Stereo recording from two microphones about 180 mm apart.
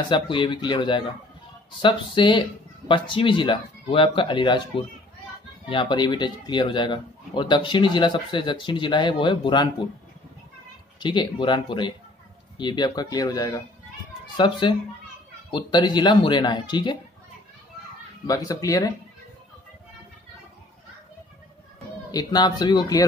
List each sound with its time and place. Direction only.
0.1 s a man's voice: 25° left (ahead or behind)
11.0 s a man's voice: 25° left (ahead or behind)
18.2 s a man's voice: 20° left (ahead or behind)
22.1 s a man's voice: 20° left (ahead or behind)